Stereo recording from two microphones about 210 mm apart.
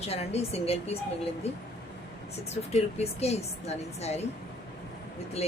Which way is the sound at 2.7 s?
30° left (ahead or behind).